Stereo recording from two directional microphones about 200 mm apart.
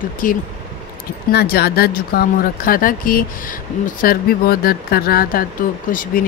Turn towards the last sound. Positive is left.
turn(degrees=45)  # may be behind; listen again after turning